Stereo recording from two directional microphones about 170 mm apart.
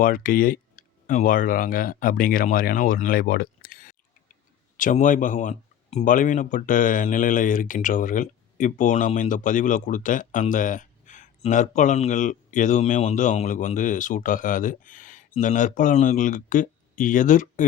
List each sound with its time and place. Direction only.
0.0 s speech: 55° left (ahead or behind)